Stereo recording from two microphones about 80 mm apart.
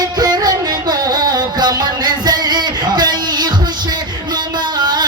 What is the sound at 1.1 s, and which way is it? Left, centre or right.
Music, right.